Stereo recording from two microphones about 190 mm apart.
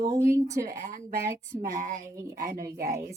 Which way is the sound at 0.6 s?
45° right (ahead or behind).